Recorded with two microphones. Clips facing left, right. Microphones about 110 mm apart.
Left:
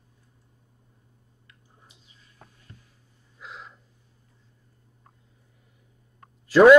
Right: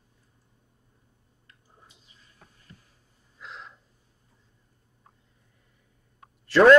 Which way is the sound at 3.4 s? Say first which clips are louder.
Left 1 dB; 5° left (ahead or behind).